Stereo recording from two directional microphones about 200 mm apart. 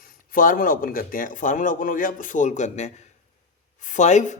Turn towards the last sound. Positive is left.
turn(degrees=35)  # may be behind; listen again after turning